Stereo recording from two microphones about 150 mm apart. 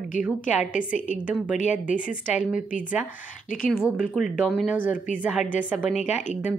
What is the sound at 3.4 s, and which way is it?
Speech, 70° left (ahead or behind).